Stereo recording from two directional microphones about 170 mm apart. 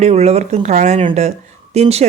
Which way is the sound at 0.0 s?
40° right (ahead or behind).